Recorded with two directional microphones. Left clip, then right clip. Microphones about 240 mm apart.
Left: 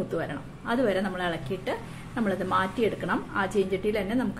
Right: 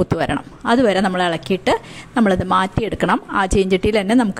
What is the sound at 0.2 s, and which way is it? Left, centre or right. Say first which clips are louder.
Speech: right 13 dB; right.